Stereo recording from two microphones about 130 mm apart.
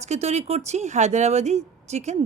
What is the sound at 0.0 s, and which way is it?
A woman's voice, 60° right (ahead or behind).